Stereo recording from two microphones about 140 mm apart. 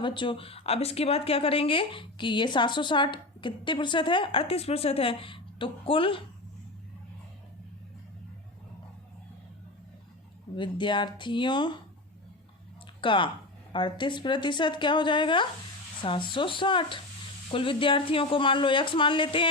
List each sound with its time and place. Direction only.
0.0 s speech: 35° left (ahead or behind)
10.5 s speech: 35° left (ahead or behind)
13.0 s speech: 35° left (ahead or behind)